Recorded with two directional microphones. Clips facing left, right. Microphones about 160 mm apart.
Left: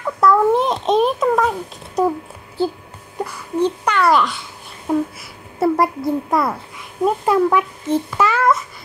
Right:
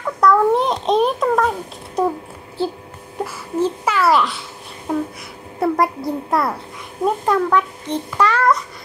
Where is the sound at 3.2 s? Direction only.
5° right (ahead or behind).